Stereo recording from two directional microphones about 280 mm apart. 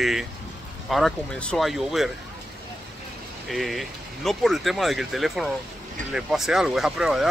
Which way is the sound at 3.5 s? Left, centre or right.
Centre.